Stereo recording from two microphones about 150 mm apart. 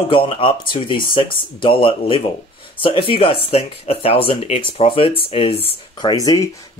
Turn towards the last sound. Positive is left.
turn(degrees=25)  # may be behind; listen again after turning